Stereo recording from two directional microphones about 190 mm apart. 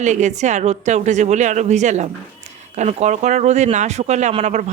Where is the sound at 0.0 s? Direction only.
40° right (ahead or behind).